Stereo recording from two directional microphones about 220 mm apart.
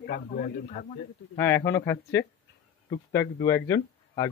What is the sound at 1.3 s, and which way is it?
Speech, 10° left (ahead or behind).